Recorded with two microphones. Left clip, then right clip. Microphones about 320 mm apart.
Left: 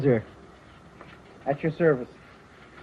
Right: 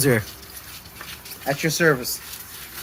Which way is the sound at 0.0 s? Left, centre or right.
Right.